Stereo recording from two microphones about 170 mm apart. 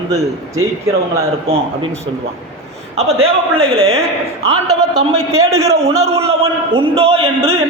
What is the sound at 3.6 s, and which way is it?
Speech, 35° right (ahead or behind).